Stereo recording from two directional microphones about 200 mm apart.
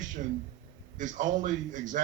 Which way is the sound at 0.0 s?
40° right (ahead or behind).